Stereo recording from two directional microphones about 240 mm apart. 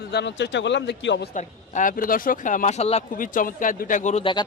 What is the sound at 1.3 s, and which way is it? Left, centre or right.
Speech, left.